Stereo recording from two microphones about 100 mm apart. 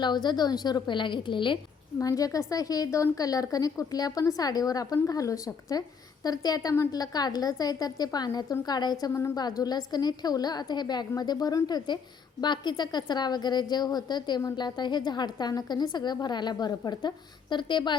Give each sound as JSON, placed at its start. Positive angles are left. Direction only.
{"t": 0.0, "sound": "a woman's voice", "side_deg": 45}
{"t": 2.0, "sound": "a woman's voice", "side_deg": 35}